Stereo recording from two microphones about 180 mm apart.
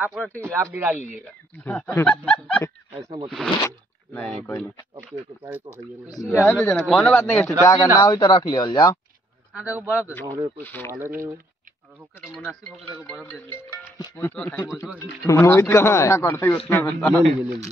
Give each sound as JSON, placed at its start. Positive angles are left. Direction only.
{"t": 0.0, "sound": "speech", "side_deg": 0}
{"t": 0.4, "sound": "speech", "side_deg": -15}
{"t": 0.9, "sound": "speech", "side_deg": 40}
{"t": 1.6, "sound": "speech", "side_deg": 10}
{"t": 3.0, "sound": "speech", "side_deg": -30}
{"t": 3.6, "sound": "zipper", "side_deg": 15}
{"t": 4.4, "sound": "speech", "side_deg": 10}
{"t": 5.4, "sound": "speech", "side_deg": -10}
{"t": 6.3, "sound": "speech", "side_deg": 15}
{"t": 9.6, "sound": "speech", "side_deg": -10}
{"t": 10.6, "sound": "speech", "side_deg": 10}
{"t": 12.4, "sound": "speech", "side_deg": 5}
{"t": 13.6, "sound": "speech", "side_deg": 15}